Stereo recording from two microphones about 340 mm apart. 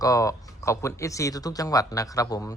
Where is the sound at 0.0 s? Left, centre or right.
Centre.